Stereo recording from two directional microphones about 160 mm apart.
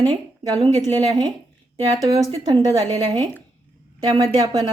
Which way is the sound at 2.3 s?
25° right (ahead or behind).